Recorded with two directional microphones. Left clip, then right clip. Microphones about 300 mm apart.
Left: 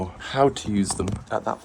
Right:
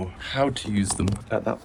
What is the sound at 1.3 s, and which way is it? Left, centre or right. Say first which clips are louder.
Speech: even; right.